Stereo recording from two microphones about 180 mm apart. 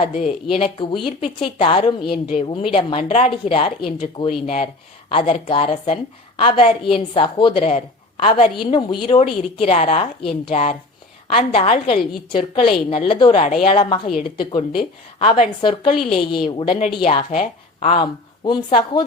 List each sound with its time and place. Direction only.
0.0 s speech: 35° left (ahead or behind)
14.1 s speech: 40° left (ahead or behind)
14.8 s speech: 30° left (ahead or behind)
16.0 s a woman's voice: centre (ahead or behind)
16.3 s speech: 25° left (ahead or behind)